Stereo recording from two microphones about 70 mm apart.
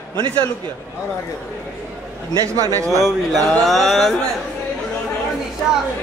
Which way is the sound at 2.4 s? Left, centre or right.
Right.